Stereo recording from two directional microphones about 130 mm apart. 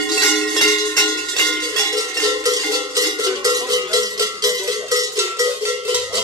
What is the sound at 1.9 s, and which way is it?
Cowbell, 30° right (ahead or behind).